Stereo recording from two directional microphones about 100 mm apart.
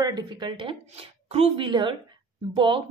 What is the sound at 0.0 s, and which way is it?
Speech, 45° right (ahead or behind).